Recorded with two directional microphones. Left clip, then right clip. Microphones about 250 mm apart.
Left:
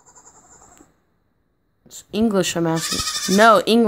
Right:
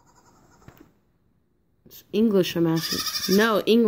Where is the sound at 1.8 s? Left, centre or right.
Centre.